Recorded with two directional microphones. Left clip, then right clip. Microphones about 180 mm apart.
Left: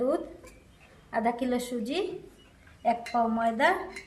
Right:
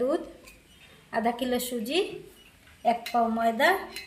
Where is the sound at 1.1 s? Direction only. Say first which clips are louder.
Right 1 dB; 25° right (ahead or behind).